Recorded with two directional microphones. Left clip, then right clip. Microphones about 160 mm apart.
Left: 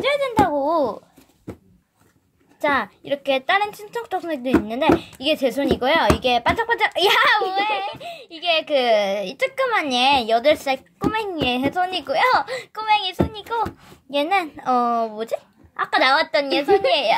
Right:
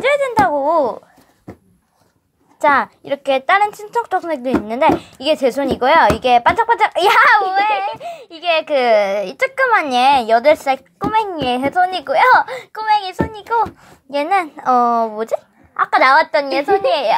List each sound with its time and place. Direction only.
0.0 s speech: 10° right (ahead or behind)
2.6 s a child's voice: 10° right (ahead or behind)